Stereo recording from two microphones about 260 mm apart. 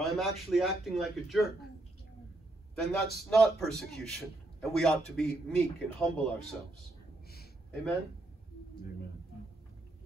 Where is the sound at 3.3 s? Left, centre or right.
Centre.